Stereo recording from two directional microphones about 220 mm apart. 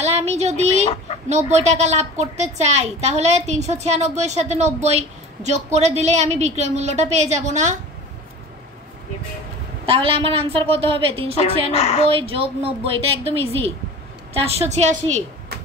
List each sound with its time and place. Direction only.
0.0 s a sound: 30° right (ahead or behind)
1.3 s a woman's voice: 30° right (ahead or behind)
9.8 s a woman's voice: 25° right (ahead or behind)
11.7 s a woman's voice: 30° left (ahead or behind)
12.1 s a woman's voice: 25° right (ahead or behind)